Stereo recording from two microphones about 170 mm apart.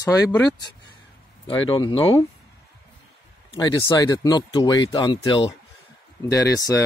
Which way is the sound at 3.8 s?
20° left (ahead or behind).